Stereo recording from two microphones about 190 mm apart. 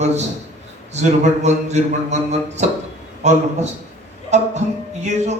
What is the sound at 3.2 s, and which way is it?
A man's voice, 35° right (ahead or behind).